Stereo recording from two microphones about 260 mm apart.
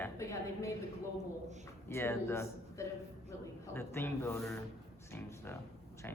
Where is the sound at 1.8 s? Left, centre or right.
Centre.